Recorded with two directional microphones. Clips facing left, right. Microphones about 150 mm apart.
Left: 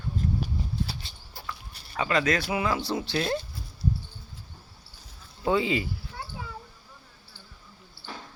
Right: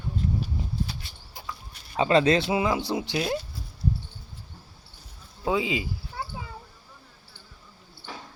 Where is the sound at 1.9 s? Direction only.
30° right (ahead or behind).